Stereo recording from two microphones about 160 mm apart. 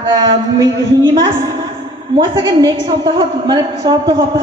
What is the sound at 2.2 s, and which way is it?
A woman's voice, 25° right (ahead or behind).